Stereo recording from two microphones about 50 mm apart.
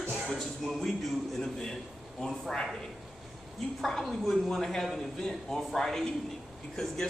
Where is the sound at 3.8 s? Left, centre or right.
Centre.